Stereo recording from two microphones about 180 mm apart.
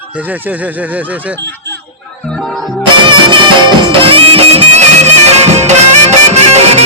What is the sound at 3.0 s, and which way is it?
Music, 25° right (ahead or behind).